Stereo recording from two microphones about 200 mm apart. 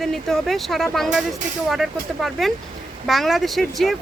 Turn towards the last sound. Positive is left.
turn(degrees=0)  # may be behind; listen again after turning